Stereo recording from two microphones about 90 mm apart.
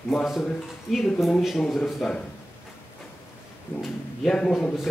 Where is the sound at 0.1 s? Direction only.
Centre (ahead or behind).